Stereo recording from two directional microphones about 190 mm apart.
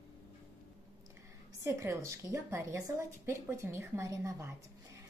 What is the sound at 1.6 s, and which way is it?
A woman's voice, 15° right (ahead or behind).